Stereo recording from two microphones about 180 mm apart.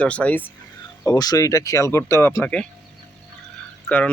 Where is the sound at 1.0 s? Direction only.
20° left (ahead or behind).